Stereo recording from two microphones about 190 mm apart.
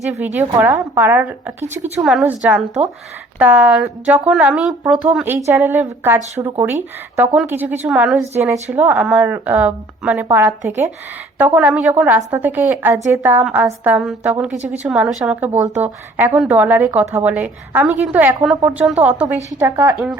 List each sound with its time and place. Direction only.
0.3 s a woman's voice: 10° right (ahead or behind)
8.2 s a woman's voice: 15° right (ahead or behind)
11.3 s a woman's voice: 10° right (ahead or behind)